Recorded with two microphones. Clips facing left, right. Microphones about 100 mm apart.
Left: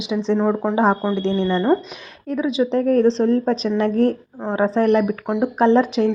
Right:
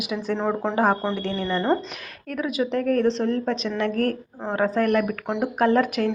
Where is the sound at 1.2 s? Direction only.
25° left (ahead or behind).